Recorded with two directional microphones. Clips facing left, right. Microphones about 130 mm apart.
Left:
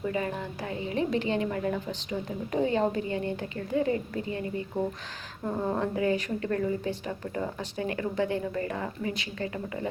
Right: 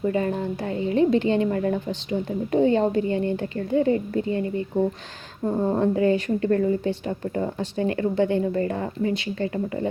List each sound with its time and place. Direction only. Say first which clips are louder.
0.0 s a woman's voice: right 7 dB; 35° right (ahead or behind)
5.5 s a woman's voice: right 6 dB; 25° right (ahead or behind)
5.8 s a woman's voice: right 8 dB; 35° right (ahead or behind)